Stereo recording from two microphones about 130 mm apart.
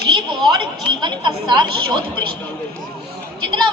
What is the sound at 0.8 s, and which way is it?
Chatter, 35° right (ahead or behind).